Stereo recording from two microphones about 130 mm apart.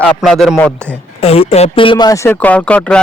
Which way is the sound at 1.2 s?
50° left (ahead or behind).